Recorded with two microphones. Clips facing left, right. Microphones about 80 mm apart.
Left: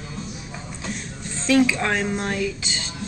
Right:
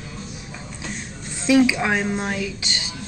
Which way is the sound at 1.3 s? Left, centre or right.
Centre.